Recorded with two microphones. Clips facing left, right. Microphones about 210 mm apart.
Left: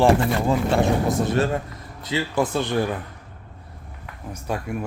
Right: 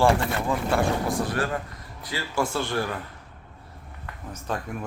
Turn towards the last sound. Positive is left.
turn(degrees=10)  # may be behind; listen again after turning